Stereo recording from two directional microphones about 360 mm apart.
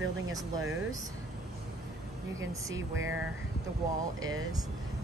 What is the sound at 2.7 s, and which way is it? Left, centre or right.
Speech, right.